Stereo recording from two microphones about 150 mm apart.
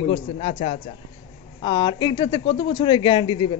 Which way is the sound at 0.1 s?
40° left (ahead or behind).